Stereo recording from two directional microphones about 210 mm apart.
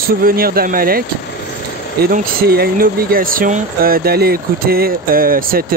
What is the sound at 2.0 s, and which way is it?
Speech, 45° right (ahead or behind).